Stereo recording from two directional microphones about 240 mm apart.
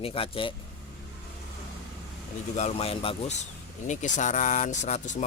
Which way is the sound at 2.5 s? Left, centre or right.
Left.